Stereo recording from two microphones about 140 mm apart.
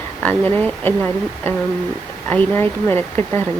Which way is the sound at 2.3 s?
15° left (ahead or behind).